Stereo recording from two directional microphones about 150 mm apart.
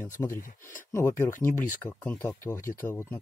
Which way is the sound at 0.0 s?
15° left (ahead or behind).